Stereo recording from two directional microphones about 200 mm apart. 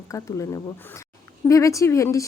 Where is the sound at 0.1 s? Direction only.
15° left (ahead or behind).